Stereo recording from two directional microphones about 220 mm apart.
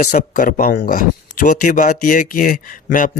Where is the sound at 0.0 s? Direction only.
35° left (ahead or behind).